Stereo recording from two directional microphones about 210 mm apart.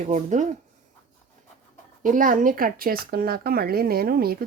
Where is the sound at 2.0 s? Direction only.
40° right (ahead or behind).